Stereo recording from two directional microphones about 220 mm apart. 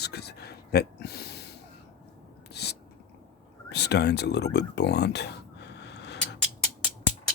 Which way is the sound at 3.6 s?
50° left (ahead or behind).